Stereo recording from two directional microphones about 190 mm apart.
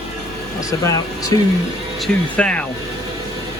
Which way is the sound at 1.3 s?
20° left (ahead or behind).